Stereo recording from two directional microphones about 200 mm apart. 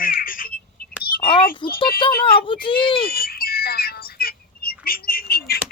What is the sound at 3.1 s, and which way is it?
Bird, 50° left (ahead or behind).